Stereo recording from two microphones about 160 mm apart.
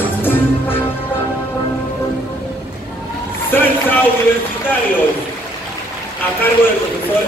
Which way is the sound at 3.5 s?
10° left (ahead or behind).